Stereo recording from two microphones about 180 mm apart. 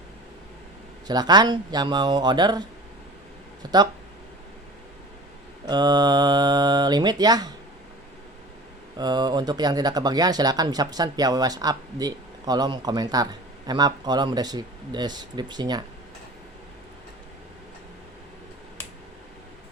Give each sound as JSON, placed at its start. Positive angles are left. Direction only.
{"t": 1.0, "sound": "speech", "side_deg": -20}
{"t": 5.6, "sound": "speech", "side_deg": -20}
{"t": 9.0, "sound": "speech", "side_deg": -25}